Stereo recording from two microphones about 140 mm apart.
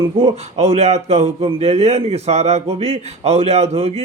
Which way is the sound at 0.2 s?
45° right (ahead or behind).